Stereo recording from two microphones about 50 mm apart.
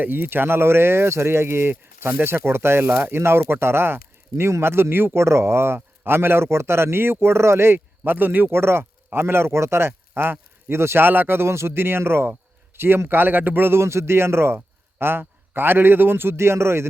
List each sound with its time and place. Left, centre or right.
0.0 s a man's voice: right
5.2 s a man's voice: right
8.0 s a man's voice: right